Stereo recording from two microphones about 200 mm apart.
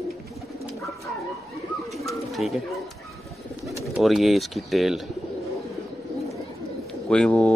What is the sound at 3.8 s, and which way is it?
Speech, centre (ahead or behind).